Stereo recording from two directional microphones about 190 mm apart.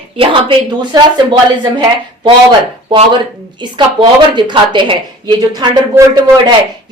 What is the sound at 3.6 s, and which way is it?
A woman's voice, 25° right (ahead or behind).